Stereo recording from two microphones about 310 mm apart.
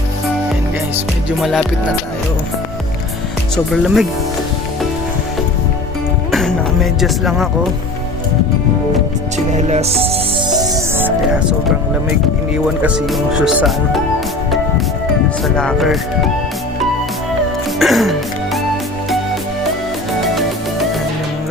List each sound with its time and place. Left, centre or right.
1.4 s speech: centre
3.5 s speech: centre
7.0 s speech: centre
9.5 s music: right
12.8 s speech: centre
15.4 s speech: centre
17.7 s music: centre